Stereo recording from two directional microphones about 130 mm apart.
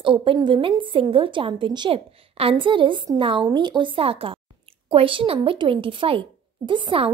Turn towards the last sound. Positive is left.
turn(degrees=-40)  # may be behind; listen again after turning